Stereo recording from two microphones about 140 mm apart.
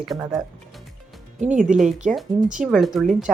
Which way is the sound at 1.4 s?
60° right (ahead or behind).